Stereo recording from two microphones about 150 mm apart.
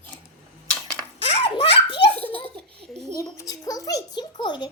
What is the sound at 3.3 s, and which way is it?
A child's voice, 25° left (ahead or behind).